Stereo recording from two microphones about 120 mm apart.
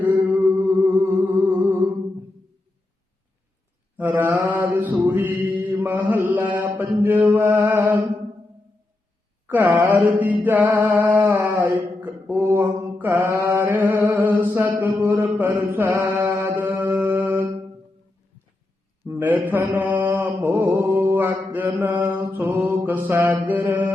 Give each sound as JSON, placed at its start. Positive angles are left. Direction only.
{"t": 0.0, "sound": "music", "side_deg": -15}
{"t": 3.9, "sound": "mantra", "side_deg": -15}
{"t": 9.5, "sound": "mantra", "side_deg": -15}
{"t": 10.4, "sound": "a sound", "side_deg": -15}
{"t": 17.2, "sound": "mantra", "side_deg": -20}
{"t": 19.0, "sound": "mantra", "side_deg": -15}